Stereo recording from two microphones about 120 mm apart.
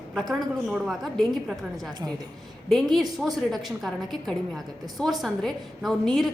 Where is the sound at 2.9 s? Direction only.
Centre (ahead or behind).